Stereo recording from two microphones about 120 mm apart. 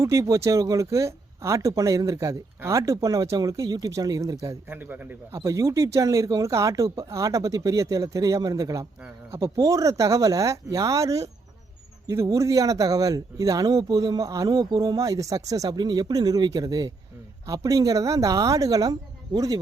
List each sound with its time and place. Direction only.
0.0 s speech: 25° right (ahead or behind)
4.7 s speech: 15° right (ahead or behind); by 19.5 s 30° right (ahead or behind)